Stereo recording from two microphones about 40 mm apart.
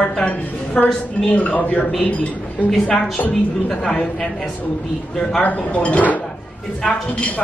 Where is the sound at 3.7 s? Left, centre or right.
Centre.